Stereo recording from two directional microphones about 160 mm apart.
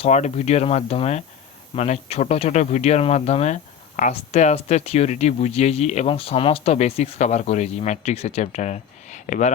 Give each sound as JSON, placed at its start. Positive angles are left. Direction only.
{"t": 0.0, "sound": "speech", "side_deg": 45}